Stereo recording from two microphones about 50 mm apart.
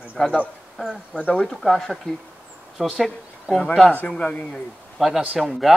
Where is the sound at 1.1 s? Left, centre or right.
Left.